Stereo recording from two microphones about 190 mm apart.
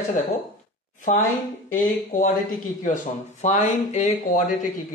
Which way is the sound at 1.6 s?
45° left (ahead or behind).